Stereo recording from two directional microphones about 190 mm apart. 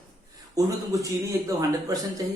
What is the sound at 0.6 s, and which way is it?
Speech, 20° right (ahead or behind).